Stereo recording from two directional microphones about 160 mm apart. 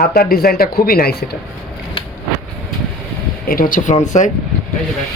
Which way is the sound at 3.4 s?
65° left (ahead or behind).